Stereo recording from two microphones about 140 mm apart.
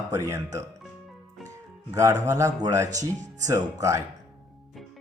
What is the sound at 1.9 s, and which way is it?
Speech, 20° right (ahead or behind).